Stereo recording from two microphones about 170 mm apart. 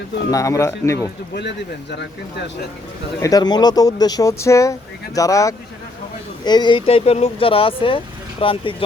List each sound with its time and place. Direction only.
0.3 s speech: 20° left (ahead or behind)
1.4 s speech: 85° left
3.2 s speech: 20° left (ahead or behind)